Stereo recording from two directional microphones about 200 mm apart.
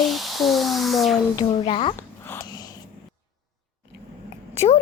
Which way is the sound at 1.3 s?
25° left (ahead or behind).